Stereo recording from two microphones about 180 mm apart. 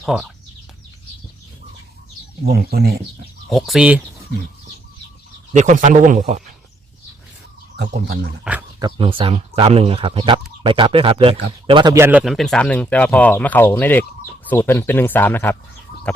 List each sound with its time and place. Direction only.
0.0 s speech: centre (ahead or behind)
2.4 s speech: 60° right (ahead or behind)
3.5 s speech: centre (ahead or behind)
5.5 s a man's voice: 45° right (ahead or behind)
7.8 s speech: 65° right (ahead or behind)
8.8 s speech: 30° right (ahead or behind)
11.9 s speech: 10° right (ahead or behind)
12.2 s speech: centre (ahead or behind)